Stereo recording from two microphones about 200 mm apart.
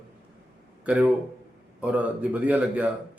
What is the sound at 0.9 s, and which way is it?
Speech, 5° right (ahead or behind).